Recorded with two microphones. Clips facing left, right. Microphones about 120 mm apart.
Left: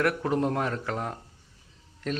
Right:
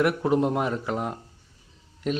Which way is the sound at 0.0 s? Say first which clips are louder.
Right 3 dB; 15° right (ahead or behind).